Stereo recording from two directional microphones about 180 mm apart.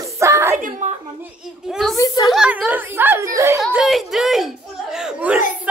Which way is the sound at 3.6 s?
Centre (ahead or behind).